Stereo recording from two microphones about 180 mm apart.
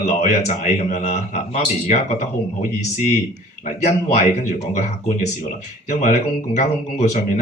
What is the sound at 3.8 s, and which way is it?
Speech, 40° left (ahead or behind).